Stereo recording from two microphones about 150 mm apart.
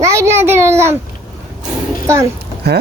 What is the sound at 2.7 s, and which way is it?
Speech, 90° right.